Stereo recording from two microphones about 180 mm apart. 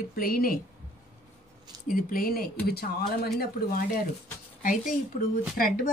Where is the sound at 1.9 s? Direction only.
50° left (ahead or behind).